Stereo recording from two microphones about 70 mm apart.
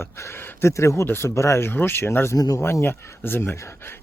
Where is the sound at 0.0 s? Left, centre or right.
Left.